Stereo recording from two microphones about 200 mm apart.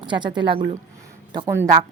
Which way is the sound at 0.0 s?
25° right (ahead or behind).